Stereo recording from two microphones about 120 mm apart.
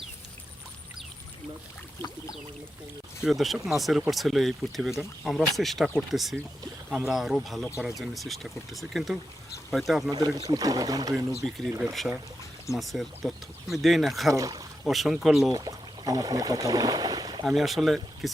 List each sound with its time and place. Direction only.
3.2 s speech: centre (ahead or behind)
10.1 s speech: 35° right (ahead or behind)
11.4 s speech: 5° left (ahead or behind)
12.7 s speech: centre (ahead or behind)
14.3 s speech: 30° right (ahead or behind)
14.8 s speech: centre (ahead or behind)
15.5 s speech: 30° right (ahead or behind)
17.4 s speech: centre (ahead or behind)